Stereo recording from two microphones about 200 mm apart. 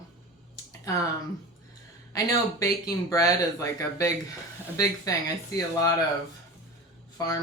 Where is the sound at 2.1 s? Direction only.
15° left (ahead or behind).